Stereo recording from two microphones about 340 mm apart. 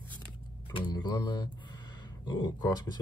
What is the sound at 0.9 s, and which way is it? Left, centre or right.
Speech, centre.